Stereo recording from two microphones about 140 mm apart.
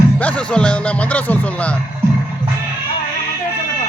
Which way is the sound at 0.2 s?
10° left (ahead or behind).